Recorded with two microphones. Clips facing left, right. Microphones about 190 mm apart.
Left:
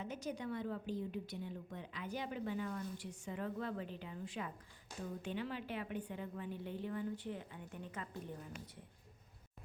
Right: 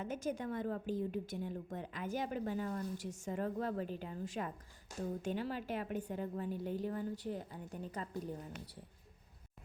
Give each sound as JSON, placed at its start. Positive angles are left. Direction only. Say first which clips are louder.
{"t": 0.0, "sound": "a woman's voice", "louder": "right 4 dB", "side_deg": -50}